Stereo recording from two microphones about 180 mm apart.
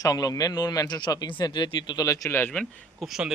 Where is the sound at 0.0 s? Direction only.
20° left (ahead or behind).